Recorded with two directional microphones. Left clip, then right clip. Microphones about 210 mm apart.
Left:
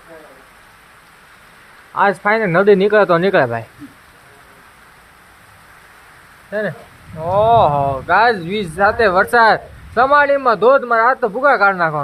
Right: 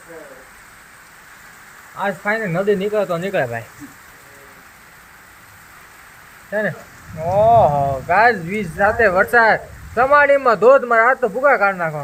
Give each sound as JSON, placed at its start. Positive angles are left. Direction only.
{"t": 2.0, "sound": "speech", "side_deg": 35}
{"t": 6.5, "sound": "speech", "side_deg": 0}
{"t": 7.3, "sound": "speech", "side_deg": 20}
{"t": 10.3, "sound": "a man's voice", "side_deg": 0}